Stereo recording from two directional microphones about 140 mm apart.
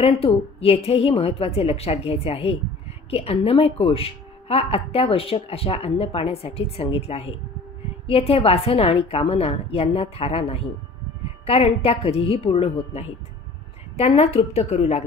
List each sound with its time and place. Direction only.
0.0 s a woman's voice: 45° left (ahead or behind)